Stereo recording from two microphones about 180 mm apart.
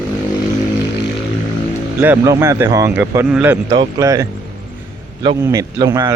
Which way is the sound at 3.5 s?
20° right (ahead or behind).